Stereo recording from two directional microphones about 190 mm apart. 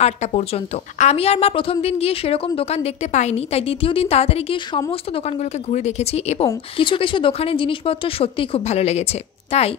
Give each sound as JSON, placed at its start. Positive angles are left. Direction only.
{"t": 0.0, "sound": "a woman's voice", "side_deg": 35}